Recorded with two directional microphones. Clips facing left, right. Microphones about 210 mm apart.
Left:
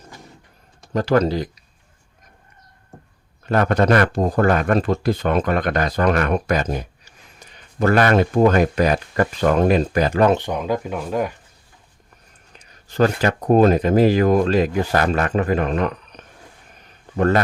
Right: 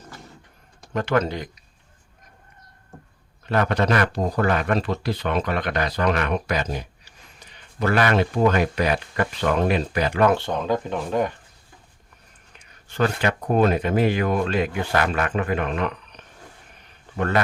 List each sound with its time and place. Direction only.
0.9 s speech: 35° left (ahead or behind)
3.4 s speech: 45° left (ahead or behind)
10.2 s speech: 15° left (ahead or behind)
12.5 s speech: 40° left (ahead or behind)